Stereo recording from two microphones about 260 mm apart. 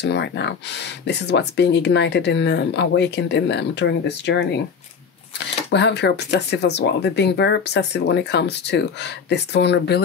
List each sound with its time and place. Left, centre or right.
0.0 s speech: left
5.7 s speech: left